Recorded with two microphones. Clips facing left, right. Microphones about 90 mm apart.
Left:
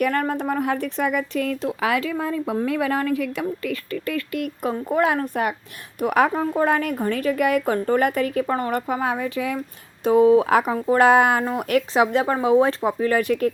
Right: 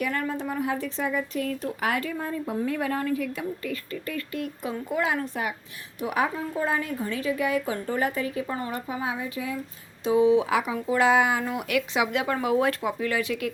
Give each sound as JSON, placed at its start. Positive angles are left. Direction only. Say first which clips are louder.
{"t": 0.0, "sound": "speech", "louder": "left 6 dB", "side_deg": 55}
{"t": 4.6, "sound": "a woman's voice", "louder": "left 7 dB", "side_deg": 50}
{"t": 10.0, "sound": "speech", "louder": "left 5 dB", "side_deg": 50}
{"t": 12.8, "sound": "speech", "louder": "left 6 dB", "side_deg": 40}